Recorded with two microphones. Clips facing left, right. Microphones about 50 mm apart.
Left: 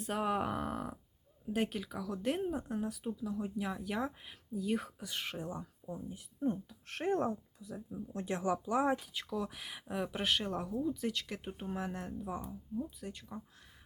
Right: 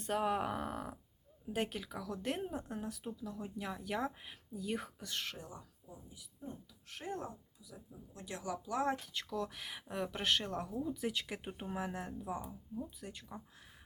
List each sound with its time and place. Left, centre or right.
0.0 s speech: centre
5.3 s speech: left
5.8 s speech: left
7.9 s speech: left; by 9.0 s centre
9.0 s speech: centre